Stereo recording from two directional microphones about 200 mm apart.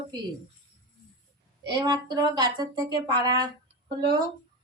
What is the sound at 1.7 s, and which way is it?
Speech, 20° right (ahead or behind).